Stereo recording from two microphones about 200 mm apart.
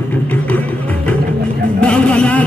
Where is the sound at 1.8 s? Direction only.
5° left (ahead or behind).